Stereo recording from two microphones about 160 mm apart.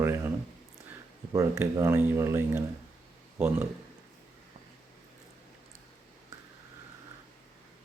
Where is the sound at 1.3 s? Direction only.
20° right (ahead or behind).